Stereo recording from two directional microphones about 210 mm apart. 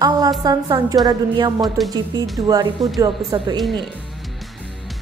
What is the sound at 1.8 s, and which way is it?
Speech, centre (ahead or behind).